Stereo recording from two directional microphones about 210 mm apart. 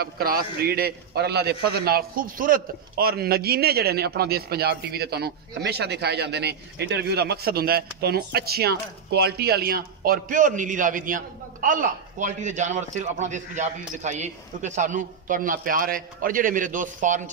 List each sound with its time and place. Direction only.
0.0 s a man's voice: 45° right (ahead or behind)